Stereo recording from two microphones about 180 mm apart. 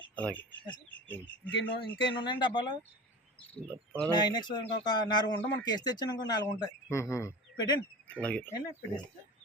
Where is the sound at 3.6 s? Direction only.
10° right (ahead or behind).